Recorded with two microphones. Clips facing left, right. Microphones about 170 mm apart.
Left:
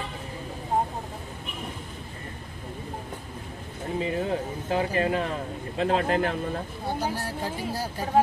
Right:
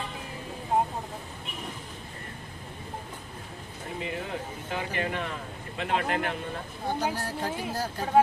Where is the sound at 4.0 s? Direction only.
30° left (ahead or behind).